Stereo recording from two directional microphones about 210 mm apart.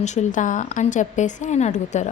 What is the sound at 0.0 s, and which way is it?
A woman's voice, 35° left (ahead or behind).